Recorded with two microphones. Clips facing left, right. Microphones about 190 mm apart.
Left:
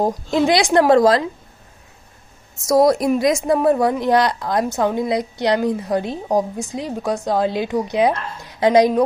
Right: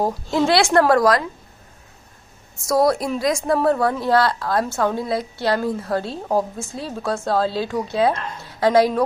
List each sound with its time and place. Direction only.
0.0 s a child's voice: 15° left (ahead or behind)
2.5 s a woman's voice: 20° left (ahead or behind)